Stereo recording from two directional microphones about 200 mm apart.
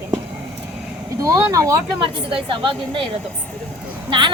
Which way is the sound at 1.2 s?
15° right (ahead or behind).